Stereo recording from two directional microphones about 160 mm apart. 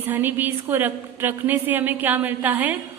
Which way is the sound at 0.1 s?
10° right (ahead or behind).